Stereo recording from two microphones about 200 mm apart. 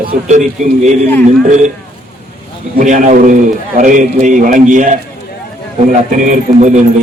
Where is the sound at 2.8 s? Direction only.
40° right (ahead or behind).